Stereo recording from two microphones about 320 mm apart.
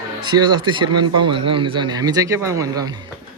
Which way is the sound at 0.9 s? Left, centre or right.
Right.